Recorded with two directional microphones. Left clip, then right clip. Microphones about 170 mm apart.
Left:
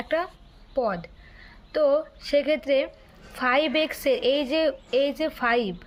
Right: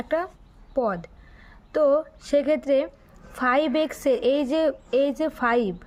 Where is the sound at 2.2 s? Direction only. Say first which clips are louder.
Right 1 dB; 40° right (ahead or behind).